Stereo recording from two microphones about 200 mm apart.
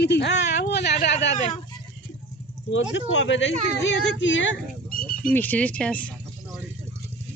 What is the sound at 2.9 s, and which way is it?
Speech, 65° left (ahead or behind).